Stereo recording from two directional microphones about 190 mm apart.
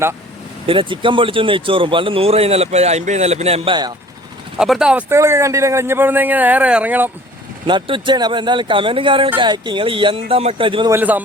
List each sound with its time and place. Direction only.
0.7 s speech: 25° right (ahead or behind)
4.5 s speech: 5° right (ahead or behind)
7.7 s speech: 25° right (ahead or behind)
10.9 s speech: 10° right (ahead or behind)